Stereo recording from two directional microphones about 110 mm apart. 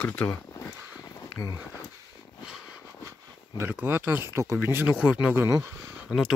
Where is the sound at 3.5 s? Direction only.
20° right (ahead or behind).